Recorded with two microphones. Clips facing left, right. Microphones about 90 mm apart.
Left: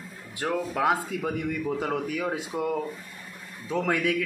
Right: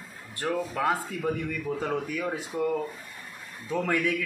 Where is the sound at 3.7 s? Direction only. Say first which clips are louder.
Left 1 dB; 20° left (ahead or behind).